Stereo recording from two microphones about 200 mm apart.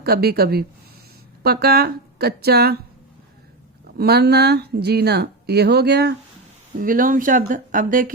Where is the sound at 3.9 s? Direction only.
50° right (ahead or behind).